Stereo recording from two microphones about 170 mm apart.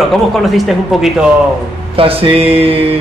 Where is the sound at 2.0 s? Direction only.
35° right (ahead or behind).